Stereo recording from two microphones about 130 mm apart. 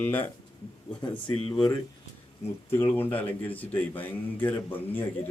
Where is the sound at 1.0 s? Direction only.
35° left (ahead or behind).